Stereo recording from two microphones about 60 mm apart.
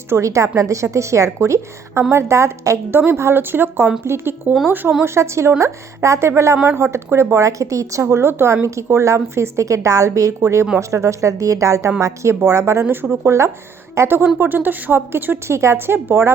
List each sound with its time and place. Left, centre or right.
0.1 s a woman's voice: right
2.9 s a woman's voice: right
8.0 s a woman's voice: right
8.6 s a woman's voice: right
10.4 s a woman's voice: right
12.9 s a woman's voice: right
14.3 s a woman's voice: right